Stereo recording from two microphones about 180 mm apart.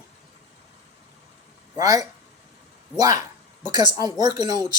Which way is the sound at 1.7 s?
20° right (ahead or behind).